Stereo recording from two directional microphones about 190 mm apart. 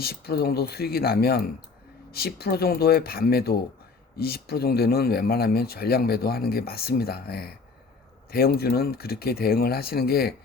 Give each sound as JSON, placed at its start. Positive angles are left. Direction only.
{"t": 0.0, "sound": "speech", "side_deg": 55}